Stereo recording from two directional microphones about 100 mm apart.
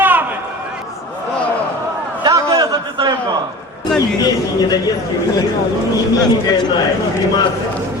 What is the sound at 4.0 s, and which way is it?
Speech, 40° left (ahead or behind).